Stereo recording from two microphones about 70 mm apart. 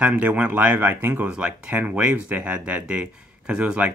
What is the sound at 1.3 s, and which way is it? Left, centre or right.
Speech, centre.